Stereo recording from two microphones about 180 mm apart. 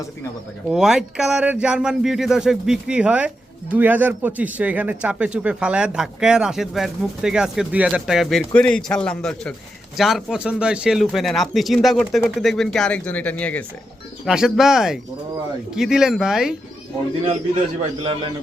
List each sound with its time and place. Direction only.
0.7 s speech: 5° right (ahead or behind)
14.3 s speech: 5° right (ahead or behind)
18.0 s speech: 30° right (ahead or behind)